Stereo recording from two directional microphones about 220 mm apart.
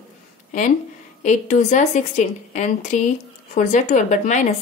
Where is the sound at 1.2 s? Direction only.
35° left (ahead or behind).